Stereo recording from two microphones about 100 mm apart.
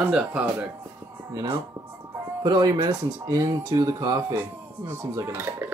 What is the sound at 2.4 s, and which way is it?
Speech, 45° right (ahead or behind).